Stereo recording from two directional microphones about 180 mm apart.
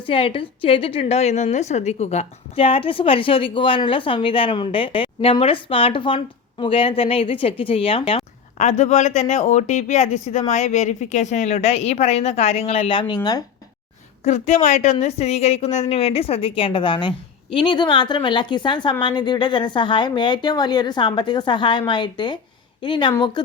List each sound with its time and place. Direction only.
0.0 s a woman's voice: 30° left (ahead or behind)
14.3 s a woman's voice: 40° left (ahead or behind)